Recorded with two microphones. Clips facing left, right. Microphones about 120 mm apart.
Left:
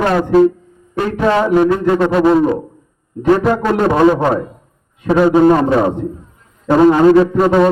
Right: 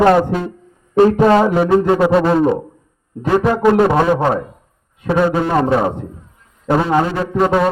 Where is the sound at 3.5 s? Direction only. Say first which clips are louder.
Right 2 dB; 10° right (ahead or behind).